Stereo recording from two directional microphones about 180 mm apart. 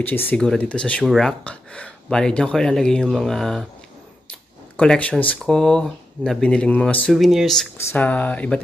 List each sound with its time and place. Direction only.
0.0 s speech: 10° left (ahead or behind)
4.7 s speech: 5° left (ahead or behind)
7.7 s speech: 10° left (ahead or behind)